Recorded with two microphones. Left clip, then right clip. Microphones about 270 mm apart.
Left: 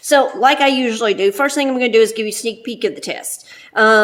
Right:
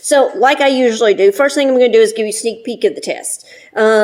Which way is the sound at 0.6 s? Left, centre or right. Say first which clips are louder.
Right 4 dB; left.